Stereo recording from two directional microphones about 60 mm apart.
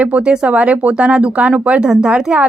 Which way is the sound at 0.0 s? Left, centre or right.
Right.